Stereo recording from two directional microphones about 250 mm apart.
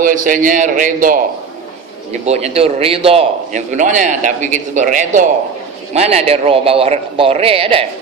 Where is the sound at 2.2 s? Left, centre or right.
Right.